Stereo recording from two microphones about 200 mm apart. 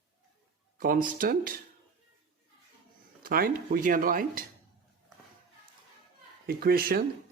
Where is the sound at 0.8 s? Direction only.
45° right (ahead or behind).